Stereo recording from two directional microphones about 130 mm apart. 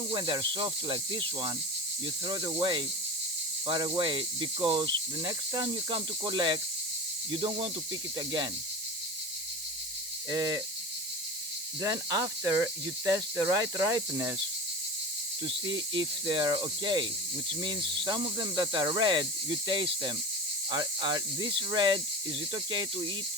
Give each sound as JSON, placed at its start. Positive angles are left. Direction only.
{"t": 0.1, "sound": "speech", "side_deg": -35}
{"t": 10.2, "sound": "speech", "side_deg": -25}
{"t": 11.8, "sound": "speech", "side_deg": -25}
{"t": 15.4, "sound": "speech", "side_deg": -35}